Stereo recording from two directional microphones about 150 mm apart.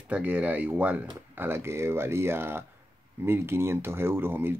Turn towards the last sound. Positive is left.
turn(degrees=-15)  # may be behind; listen again after turning